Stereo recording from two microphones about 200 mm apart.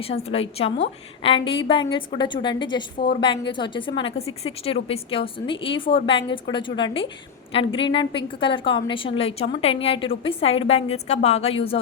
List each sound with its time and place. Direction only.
0.1 s a woman's voice: 30° left (ahead or behind)